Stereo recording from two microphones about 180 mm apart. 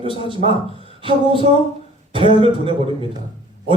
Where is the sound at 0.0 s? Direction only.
30° right (ahead or behind).